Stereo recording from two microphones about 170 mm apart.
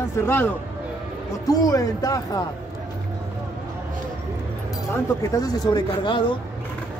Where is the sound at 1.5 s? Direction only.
20° left (ahead or behind).